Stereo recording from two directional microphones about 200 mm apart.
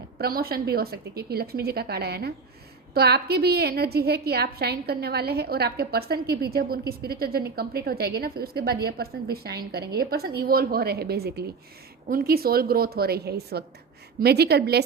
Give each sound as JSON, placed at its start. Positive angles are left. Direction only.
{"t": 0.2, "sound": "a woman's voice", "side_deg": -50}